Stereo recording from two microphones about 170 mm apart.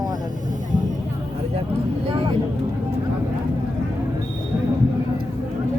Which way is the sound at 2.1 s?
30° right (ahead or behind).